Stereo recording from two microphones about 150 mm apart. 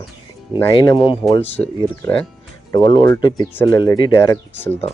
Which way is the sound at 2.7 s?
30° left (ahead or behind).